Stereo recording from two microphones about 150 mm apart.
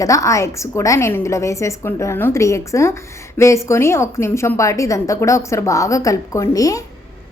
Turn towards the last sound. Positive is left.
turn(degrees=25)  # may be behind; listen again after turning